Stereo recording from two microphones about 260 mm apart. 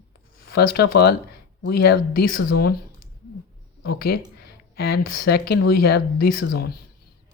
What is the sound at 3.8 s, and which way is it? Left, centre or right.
Speech, left.